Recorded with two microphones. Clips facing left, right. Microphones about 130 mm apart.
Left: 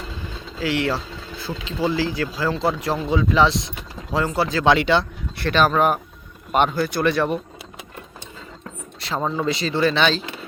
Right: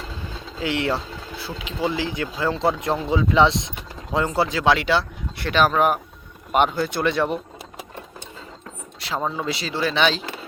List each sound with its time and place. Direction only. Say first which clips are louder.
0.6 s speech: left 1 dB; 25° right (ahead or behind)
1.4 s speech: left 2 dB; 10° right (ahead or behind)
4.5 s speech: left 4 dB; 5° right (ahead or behind)
9.0 s speech: left 2 dB; 5° right (ahead or behind)